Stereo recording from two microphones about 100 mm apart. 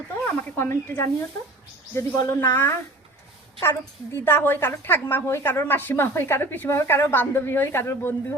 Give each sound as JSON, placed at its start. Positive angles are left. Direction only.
{"t": 0.3, "sound": "a woman's voice", "side_deg": 20}